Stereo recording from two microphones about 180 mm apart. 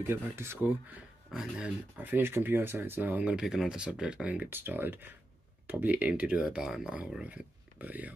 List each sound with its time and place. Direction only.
0.0 s speech: 15° right (ahead or behind)